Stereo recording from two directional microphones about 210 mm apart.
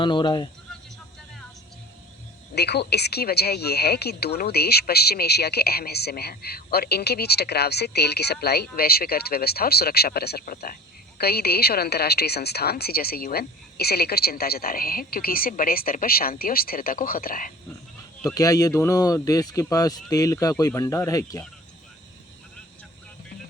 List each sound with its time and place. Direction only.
0.0 s speech: 20° left (ahead or behind)
2.6 s a woman's voice: 50° left (ahead or behind)
18.3 s speech: 15° left (ahead or behind)